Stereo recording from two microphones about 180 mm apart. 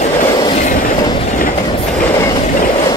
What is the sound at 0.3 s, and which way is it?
Train, 25° left (ahead or behind).